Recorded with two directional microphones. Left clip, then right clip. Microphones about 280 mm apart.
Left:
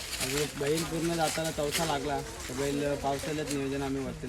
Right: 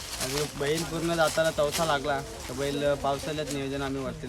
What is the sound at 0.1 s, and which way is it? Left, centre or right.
Speech, right.